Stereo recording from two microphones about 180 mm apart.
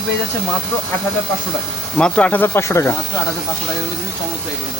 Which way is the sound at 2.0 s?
5° left (ahead or behind).